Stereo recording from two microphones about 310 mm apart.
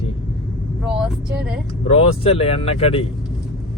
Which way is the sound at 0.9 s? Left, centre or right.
Centre.